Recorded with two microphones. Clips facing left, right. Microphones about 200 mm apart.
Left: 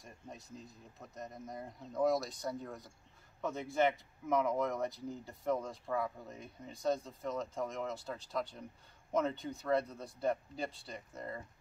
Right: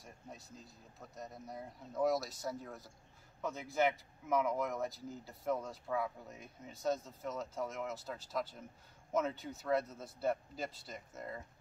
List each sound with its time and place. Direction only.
1.1 s speech: centre (ahead or behind)